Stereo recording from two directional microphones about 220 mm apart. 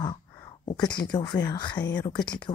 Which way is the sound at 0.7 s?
20° left (ahead or behind).